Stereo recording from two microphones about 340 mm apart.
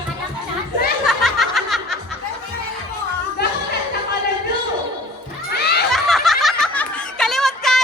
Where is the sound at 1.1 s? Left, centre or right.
Centre.